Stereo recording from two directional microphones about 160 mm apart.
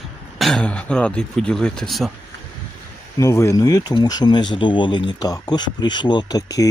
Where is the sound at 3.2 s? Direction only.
15° left (ahead or behind).